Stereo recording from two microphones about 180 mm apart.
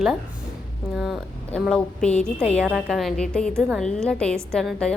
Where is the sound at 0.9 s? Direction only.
Centre (ahead or behind).